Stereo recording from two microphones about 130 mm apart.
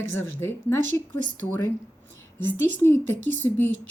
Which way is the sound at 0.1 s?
20° left (ahead or behind).